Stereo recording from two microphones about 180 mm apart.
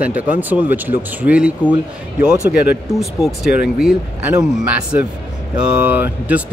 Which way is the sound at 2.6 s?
Centre (ahead or behind).